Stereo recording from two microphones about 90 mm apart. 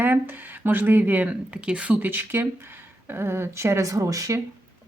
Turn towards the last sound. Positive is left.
turn(degrees=-40)  # may be behind; listen again after turning